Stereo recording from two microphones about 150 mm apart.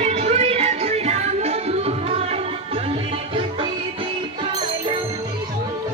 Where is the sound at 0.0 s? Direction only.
45° right (ahead or behind).